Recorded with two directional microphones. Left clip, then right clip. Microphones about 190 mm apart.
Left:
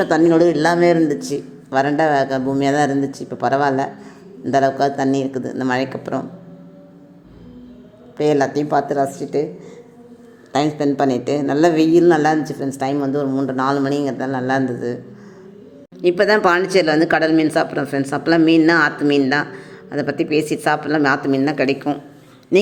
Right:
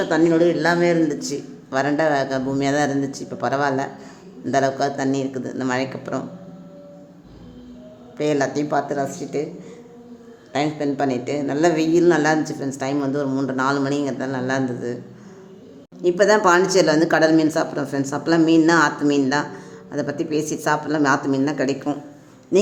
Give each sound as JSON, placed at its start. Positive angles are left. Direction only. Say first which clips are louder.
{"t": 0.0, "sound": "speech", "louder": "left 3 dB", "side_deg": 25}
{"t": 8.2, "sound": "speech", "louder": "left 4 dB", "side_deg": 15}
{"t": 10.5, "sound": "speech", "louder": "left 4 dB", "side_deg": 25}
{"t": 16.0, "sound": "speech", "louder": "left 1 dB", "side_deg": 10}